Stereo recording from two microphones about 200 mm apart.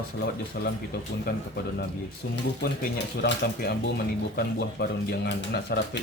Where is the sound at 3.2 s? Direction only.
55° left (ahead or behind).